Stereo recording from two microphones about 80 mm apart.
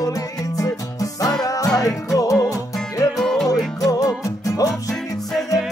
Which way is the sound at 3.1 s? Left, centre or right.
Centre.